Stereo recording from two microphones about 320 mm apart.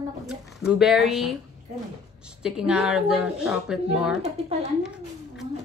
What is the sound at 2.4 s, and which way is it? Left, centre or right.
Speech, centre.